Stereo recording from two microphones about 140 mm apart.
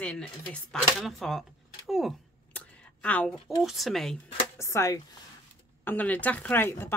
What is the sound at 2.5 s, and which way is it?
A woman's voice, 10° left (ahead or behind).